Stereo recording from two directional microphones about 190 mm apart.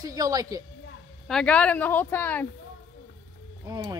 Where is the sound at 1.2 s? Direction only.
5° left (ahead or behind).